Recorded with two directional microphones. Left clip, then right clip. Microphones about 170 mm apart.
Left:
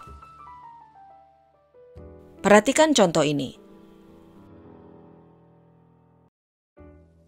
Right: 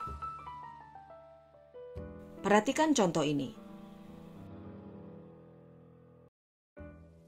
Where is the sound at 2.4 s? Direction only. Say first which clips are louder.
Left 11 dB; 50° left (ahead or behind).